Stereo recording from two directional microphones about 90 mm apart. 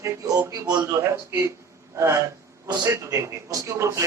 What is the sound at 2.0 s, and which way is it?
A man's voice, 35° right (ahead or behind).